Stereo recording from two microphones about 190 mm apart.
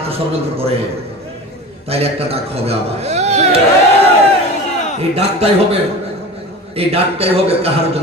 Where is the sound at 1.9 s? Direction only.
30° right (ahead or behind).